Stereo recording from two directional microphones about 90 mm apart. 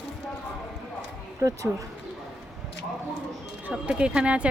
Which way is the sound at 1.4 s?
40° right (ahead or behind).